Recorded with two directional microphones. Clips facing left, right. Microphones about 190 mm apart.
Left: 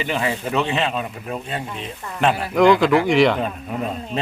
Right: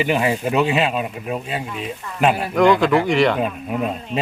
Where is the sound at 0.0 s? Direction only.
15° right (ahead or behind).